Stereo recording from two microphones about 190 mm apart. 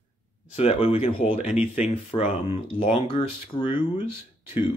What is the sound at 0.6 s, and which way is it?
Speech, 30° left (ahead or behind).